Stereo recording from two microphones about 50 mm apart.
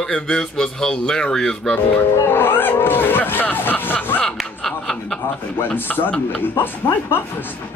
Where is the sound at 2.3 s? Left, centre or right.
Left.